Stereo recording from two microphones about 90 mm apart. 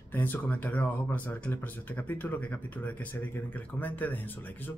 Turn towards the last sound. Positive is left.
turn(degrees=20)  # may be behind; listen again after turning